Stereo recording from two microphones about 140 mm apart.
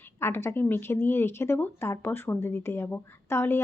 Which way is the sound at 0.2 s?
15° left (ahead or behind).